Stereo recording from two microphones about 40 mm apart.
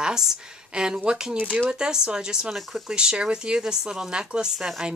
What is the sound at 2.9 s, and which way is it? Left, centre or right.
A woman's voice, right.